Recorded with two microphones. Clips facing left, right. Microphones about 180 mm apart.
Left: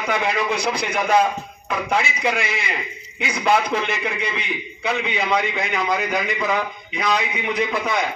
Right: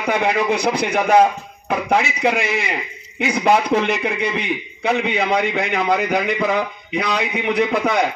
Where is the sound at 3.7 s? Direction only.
60° right (ahead or behind).